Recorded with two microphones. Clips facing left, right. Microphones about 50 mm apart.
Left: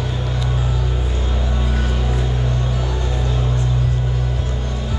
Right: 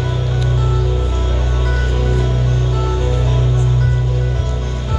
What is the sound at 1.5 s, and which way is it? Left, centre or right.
Music, centre.